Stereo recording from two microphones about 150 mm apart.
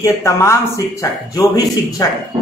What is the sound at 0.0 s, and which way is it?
Speech, 20° left (ahead or behind).